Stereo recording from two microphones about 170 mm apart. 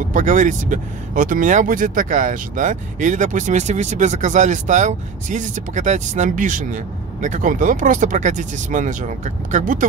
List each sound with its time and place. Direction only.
0.1 s speech: 45° right (ahead or behind)